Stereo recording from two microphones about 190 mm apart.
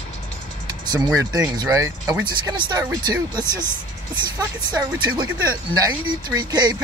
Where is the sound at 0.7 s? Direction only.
20° right (ahead or behind).